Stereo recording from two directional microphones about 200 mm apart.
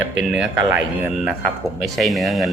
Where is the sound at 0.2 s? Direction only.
5° right (ahead or behind).